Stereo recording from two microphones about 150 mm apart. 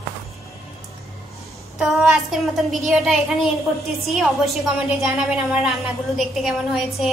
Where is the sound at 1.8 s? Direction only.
Centre (ahead or behind).